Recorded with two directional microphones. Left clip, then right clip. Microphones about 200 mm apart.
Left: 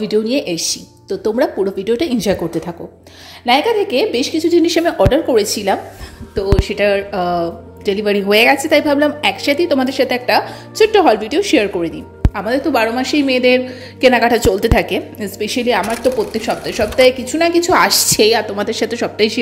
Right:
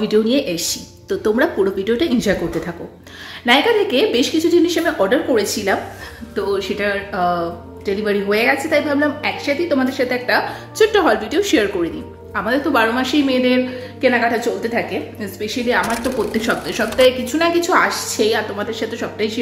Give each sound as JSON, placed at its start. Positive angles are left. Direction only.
{"t": 0.0, "sound": "speech", "side_deg": 25}
{"t": 1.0, "sound": "speech", "side_deg": 20}
{"t": 15.8, "sound": "speech", "side_deg": 0}
{"t": 16.3, "sound": "speech", "side_deg": 25}
{"t": 17.7, "sound": "speech", "side_deg": 40}